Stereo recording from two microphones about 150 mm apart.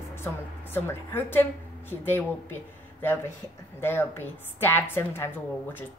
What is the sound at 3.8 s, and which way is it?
A woman's voice, 15° left (ahead or behind).